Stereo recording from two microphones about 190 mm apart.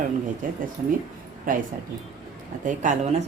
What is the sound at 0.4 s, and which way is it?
Speech, 45° right (ahead or behind).